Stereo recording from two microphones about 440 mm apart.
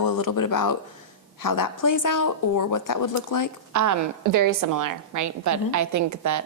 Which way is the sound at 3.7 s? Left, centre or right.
Right.